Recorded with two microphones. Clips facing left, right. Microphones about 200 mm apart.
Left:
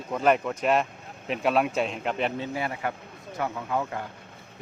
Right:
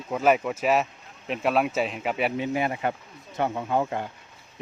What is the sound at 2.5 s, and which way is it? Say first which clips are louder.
A man's voice: right 4 dB; 20° right (ahead or behind).